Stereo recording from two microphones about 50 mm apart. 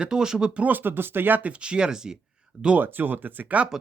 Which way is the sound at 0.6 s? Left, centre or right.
Right.